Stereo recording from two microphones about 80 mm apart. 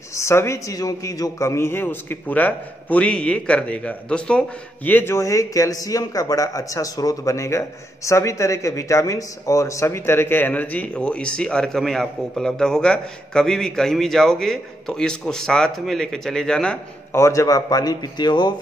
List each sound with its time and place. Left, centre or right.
0.1 s speech: left
0.7 s speech: left; by 4.9 s centre
4.9 s a man's voice: left; by 16.7 s centre
17.1 s a man's voice: left